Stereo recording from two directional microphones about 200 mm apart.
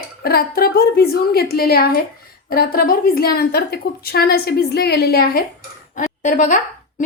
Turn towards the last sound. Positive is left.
turn(degrees=40)  # may be behind; listen again after turning